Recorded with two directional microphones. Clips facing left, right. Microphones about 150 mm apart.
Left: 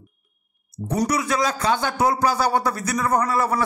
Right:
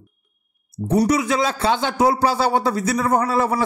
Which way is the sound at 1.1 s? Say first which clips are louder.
Right 3 dB; 25° right (ahead or behind).